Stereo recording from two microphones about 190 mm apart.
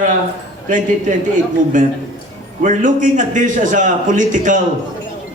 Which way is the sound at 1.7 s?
45° right (ahead or behind).